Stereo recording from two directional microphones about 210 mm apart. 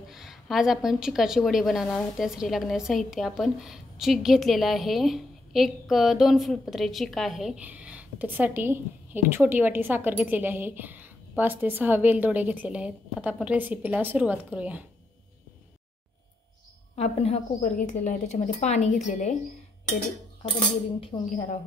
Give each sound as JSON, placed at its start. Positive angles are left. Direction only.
{"t": 0.1, "sound": "a woman's voice", "side_deg": 0}
{"t": 16.9, "sound": "a woman's voice", "side_deg": 30}
{"t": 21.0, "sound": "a woman's voice", "side_deg": 35}